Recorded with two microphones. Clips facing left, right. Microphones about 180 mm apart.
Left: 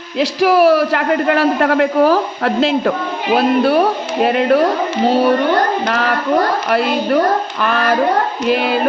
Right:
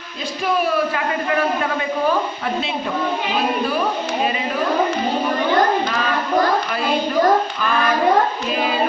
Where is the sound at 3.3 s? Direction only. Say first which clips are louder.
Left 12 dB; 75° left (ahead or behind).